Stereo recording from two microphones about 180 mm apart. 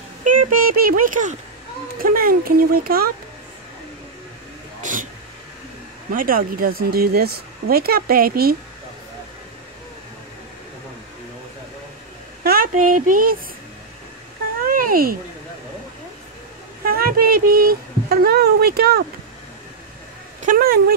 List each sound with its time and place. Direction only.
0.2 s a sound: 50° right (ahead or behind)
2.0 s speech: 55° right (ahead or behind)
4.8 s a sound: 45° right (ahead or behind)
6.1 s speech: 50° right (ahead or behind)
12.4 s speech: 50° right (ahead or behind)
14.7 s cat: 50° right (ahead or behind)
16.8 s speech: 55° right (ahead or behind)
20.4 s speech: 55° right (ahead or behind)